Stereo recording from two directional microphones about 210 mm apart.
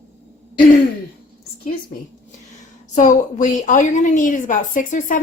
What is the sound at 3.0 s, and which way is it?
A woman's voice, 35° left (ahead or behind).